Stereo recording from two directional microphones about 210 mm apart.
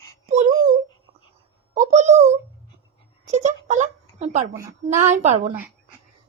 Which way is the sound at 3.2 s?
35° right (ahead or behind).